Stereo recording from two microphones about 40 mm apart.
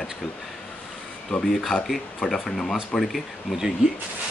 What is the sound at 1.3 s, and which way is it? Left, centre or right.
Speech, left.